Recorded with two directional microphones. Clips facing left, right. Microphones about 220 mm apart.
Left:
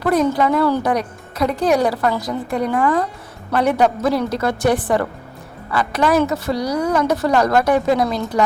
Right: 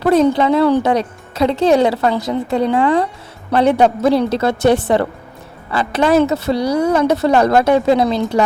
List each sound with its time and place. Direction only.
0.0 s speech: 25° right (ahead or behind)